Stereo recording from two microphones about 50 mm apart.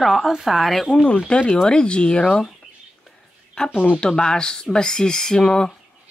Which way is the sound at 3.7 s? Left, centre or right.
Left.